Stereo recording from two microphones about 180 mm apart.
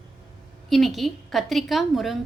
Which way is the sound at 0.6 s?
Centre (ahead or behind).